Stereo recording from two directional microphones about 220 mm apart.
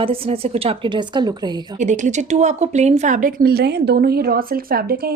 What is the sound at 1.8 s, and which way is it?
Speech, 35° right (ahead or behind).